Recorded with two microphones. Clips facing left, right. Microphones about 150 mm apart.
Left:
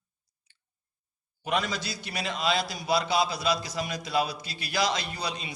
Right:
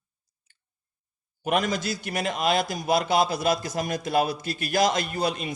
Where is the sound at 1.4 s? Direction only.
50° right (ahead or behind).